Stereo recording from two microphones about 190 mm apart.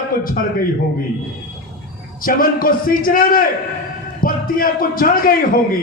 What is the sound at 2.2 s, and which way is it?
A man's voice, 50° left (ahead or behind).